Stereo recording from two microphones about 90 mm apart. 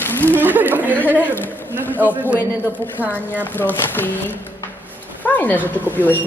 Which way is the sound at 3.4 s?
20° left (ahead or behind).